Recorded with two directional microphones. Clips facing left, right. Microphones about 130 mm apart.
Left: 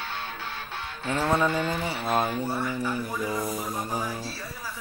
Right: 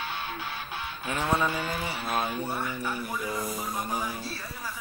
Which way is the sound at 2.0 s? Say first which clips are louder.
Left 5 dB; 25° left (ahead or behind).